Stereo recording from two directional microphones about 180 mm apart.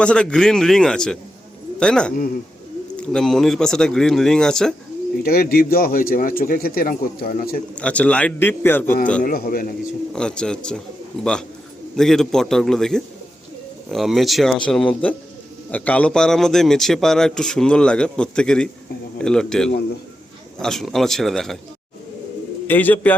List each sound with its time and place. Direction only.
0.0 s speech: 5° left (ahead or behind)
5.2 s speech: 55° left (ahead or behind)
7.8 s a man's voice: 5° left (ahead or behind)
9.2 s speech: 50° left (ahead or behind)
10.1 s speech: 5° left (ahead or behind)
22.6 s a man's voice: 10° left (ahead or behind)